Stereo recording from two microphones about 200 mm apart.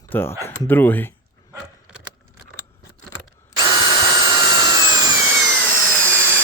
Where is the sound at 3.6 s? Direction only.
20° right (ahead or behind).